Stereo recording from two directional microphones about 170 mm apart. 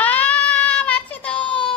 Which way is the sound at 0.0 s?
10° left (ahead or behind).